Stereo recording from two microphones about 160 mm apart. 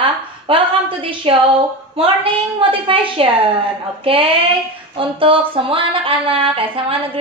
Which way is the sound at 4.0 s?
35° right (ahead or behind).